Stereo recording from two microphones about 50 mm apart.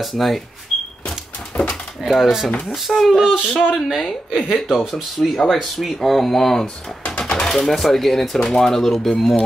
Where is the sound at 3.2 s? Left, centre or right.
Centre.